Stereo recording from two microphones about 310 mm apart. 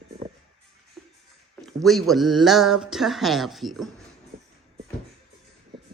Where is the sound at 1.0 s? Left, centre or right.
Centre.